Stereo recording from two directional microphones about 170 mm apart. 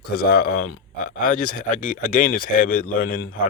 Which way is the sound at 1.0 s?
50° left (ahead or behind).